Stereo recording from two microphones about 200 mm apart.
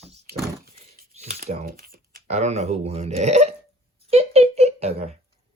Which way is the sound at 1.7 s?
45° right (ahead or behind).